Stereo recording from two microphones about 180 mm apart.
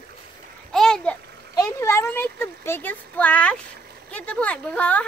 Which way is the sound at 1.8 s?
15° left (ahead or behind).